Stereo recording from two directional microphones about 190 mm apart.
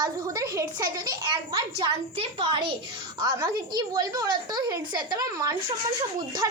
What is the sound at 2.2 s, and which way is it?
A woman's voice, 30° right (ahead or behind).